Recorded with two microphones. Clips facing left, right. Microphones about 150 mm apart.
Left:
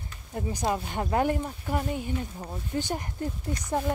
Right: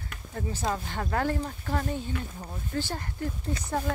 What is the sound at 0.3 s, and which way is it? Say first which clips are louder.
Speech: left 2 dB; 20° left (ahead or behind).